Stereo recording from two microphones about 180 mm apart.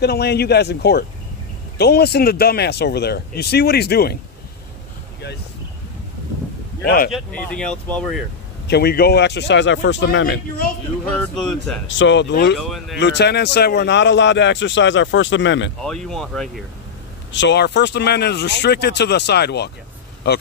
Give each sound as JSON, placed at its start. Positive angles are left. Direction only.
{"t": 0.0, "sound": "speech", "side_deg": 65}
{"t": 6.8, "sound": "speech", "side_deg": 60}
{"t": 7.1, "sound": "speech", "side_deg": 5}
{"t": 8.6, "sound": "speech", "side_deg": 65}
{"t": 11.1, "sound": "speech", "side_deg": 5}
{"t": 12.0, "sound": "speech", "side_deg": 80}
{"t": 12.5, "sound": "speech", "side_deg": 0}
{"t": 13.0, "sound": "a man's voice", "side_deg": 70}
{"t": 15.8, "sound": "speech", "side_deg": 5}
{"t": 17.3, "sound": "speech", "side_deg": 80}